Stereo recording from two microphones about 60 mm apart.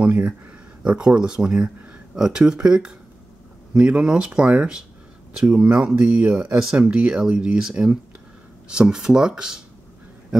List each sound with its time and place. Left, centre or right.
0.0 s speech: right